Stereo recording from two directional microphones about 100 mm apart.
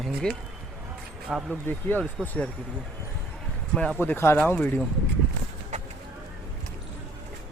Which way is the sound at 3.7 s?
10° left (ahead or behind).